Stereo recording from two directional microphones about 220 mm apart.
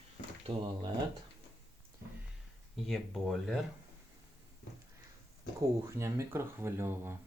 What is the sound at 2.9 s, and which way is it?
Speech, centre (ahead or behind).